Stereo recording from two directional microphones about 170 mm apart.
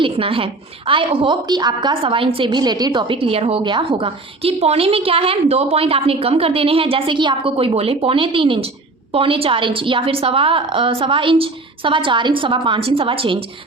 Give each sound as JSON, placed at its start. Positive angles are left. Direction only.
{"t": 0.0, "sound": "a woman's voice", "side_deg": -30}